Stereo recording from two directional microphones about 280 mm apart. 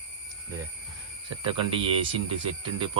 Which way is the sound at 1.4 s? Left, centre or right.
Centre.